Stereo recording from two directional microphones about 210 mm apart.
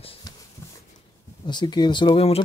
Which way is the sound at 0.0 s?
25° left (ahead or behind).